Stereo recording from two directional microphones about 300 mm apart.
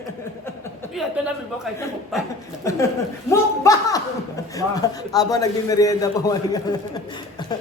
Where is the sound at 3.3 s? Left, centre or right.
Centre.